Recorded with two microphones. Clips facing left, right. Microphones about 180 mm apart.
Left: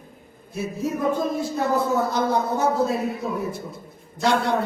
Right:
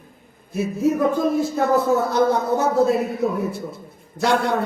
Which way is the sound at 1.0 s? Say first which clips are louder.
Right 4 dB; 55° right (ahead or behind).